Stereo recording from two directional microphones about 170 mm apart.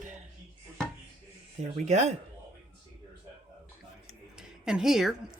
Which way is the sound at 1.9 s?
40° right (ahead or behind).